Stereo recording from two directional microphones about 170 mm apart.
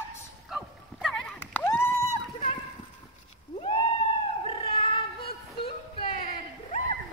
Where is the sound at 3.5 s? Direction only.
30° left (ahead or behind).